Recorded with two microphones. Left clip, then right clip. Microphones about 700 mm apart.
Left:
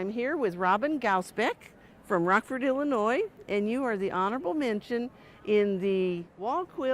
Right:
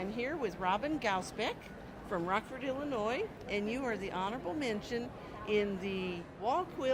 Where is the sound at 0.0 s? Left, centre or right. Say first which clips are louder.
Left 7 dB; left.